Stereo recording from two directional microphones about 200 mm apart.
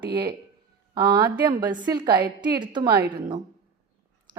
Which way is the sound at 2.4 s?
20° right (ahead or behind).